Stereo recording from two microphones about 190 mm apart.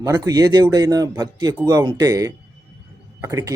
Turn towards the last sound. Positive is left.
turn(degrees=-15)  # may be behind; listen again after turning